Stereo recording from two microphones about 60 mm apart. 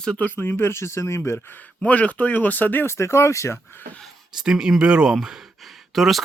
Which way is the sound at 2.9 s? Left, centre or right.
Left.